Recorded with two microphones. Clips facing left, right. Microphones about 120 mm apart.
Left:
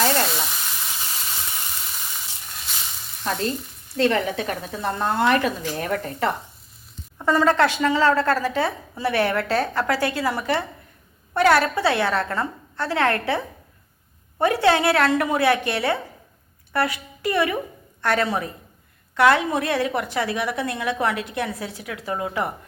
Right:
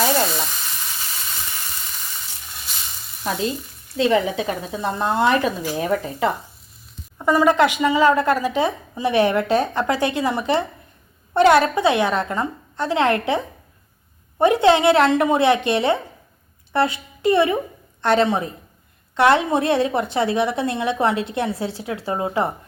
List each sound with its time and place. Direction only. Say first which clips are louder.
0.0 s frying: right 2 dB; 5° right (ahead or behind)
3.2 s a woman's voice: right 1 dB; 10° right (ahead or behind); by 22.5 s 30° right (ahead or behind)